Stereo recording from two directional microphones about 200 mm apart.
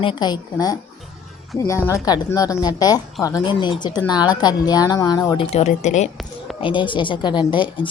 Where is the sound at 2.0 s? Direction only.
20° left (ahead or behind).